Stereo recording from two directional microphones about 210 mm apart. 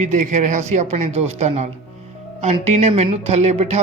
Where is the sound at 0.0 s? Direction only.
35° right (ahead or behind).